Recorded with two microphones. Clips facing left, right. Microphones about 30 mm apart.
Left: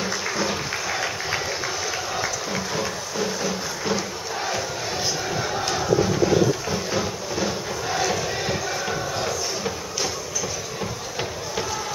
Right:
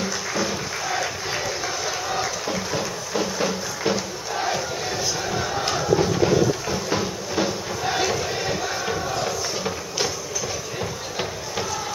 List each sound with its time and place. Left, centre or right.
0.0 s music: centre
0.8 s applause: centre
3.2 s a sound: centre
5.3 s a sound: centre
7.8 s music: centre
8.1 s music: centre